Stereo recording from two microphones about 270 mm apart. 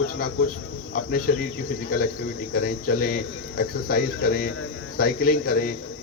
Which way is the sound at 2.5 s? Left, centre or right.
Left.